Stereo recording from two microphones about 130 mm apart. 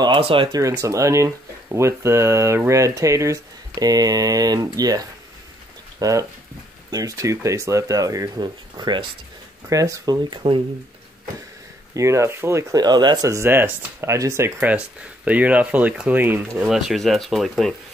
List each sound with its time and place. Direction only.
0.0 s speech: 40° right (ahead or behind)
0.5 s speech: 25° right (ahead or behind)
11.9 s speech: 25° right (ahead or behind)
16.6 s speech: 5° right (ahead or behind)